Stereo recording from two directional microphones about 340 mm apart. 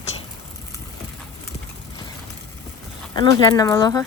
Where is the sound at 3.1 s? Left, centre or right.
Centre.